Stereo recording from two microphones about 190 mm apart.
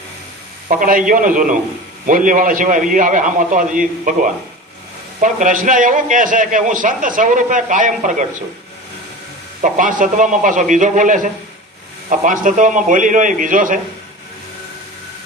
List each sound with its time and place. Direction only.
0.7 s a man's voice: 45° right (ahead or behind)
9.6 s a man's voice: 45° right (ahead or behind)